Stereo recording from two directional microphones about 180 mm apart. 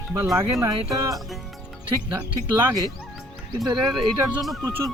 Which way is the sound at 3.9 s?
Centre (ahead or behind).